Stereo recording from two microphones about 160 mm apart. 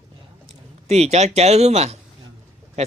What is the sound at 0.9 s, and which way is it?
Speech, 45° right (ahead or behind).